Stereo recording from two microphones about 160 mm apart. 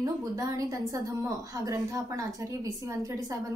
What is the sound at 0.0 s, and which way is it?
A woman's voice, 20° right (ahead or behind).